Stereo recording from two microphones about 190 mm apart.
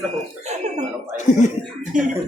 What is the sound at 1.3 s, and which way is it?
Speech, 40° left (ahead or behind).